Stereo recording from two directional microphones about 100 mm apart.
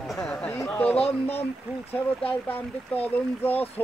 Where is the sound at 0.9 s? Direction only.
85° left.